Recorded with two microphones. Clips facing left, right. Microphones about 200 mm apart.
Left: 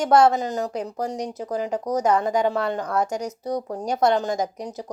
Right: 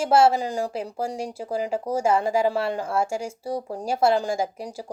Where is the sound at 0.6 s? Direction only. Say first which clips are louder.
Left 1 dB; 30° right (ahead or behind).